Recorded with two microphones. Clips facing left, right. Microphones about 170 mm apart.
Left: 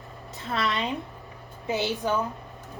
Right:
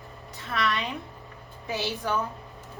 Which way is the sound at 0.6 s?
35° left (ahead or behind).